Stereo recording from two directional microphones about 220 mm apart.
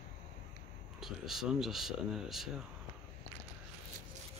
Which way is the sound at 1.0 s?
Centre (ahead or behind).